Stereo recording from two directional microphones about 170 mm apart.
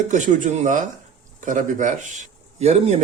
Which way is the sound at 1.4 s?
50° right (ahead or behind).